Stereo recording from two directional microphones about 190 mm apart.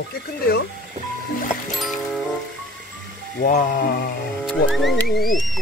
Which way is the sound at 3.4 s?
45° left (ahead or behind).